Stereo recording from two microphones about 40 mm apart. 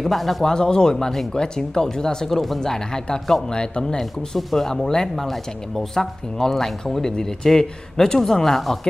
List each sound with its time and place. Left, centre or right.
0.0 s speech: centre
0.5 s speech: centre
0.9 s speech: centre
1.3 s speech: centre
4.3 s speech: centre